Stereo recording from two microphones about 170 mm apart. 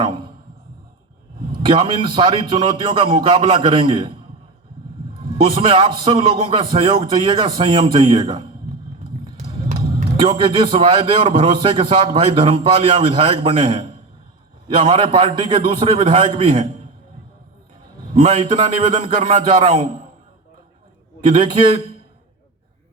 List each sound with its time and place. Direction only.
0.0 s a sound: 25° right (ahead or behind)
1.5 s a man's voice: 30° right (ahead or behind)
9.4 s music: 45° right (ahead or behind)
10.2 s a man's voice: 30° right (ahead or behind)
18.1 s a man's voice: 30° right (ahead or behind)
21.2 s a man's voice: 30° right (ahead or behind)